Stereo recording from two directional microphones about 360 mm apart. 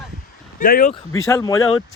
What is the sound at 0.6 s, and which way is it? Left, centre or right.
Speech, left.